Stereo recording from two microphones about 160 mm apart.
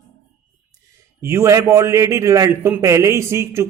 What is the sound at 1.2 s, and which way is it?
A man's voice, 15° right (ahead or behind).